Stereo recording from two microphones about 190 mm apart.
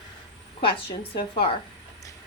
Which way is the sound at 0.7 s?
25° left (ahead or behind).